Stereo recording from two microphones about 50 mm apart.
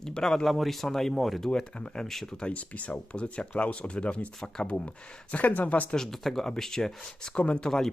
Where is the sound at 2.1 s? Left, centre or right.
Centre.